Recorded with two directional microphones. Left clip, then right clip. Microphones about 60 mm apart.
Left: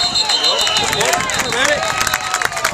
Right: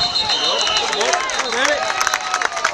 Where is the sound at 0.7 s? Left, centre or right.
Left.